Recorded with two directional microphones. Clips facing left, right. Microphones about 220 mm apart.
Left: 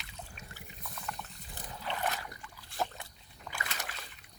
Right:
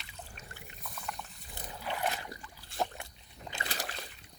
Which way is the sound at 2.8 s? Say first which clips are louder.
Right 1 dB; 15° right (ahead or behind).